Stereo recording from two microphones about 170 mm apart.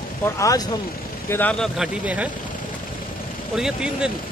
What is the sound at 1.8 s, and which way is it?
Speech, 10° right (ahead or behind).